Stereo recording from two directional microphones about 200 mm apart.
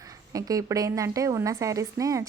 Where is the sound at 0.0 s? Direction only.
15° right (ahead or behind).